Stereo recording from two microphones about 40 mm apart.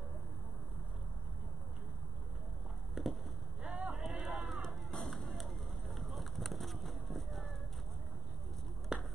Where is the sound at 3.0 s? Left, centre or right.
Centre.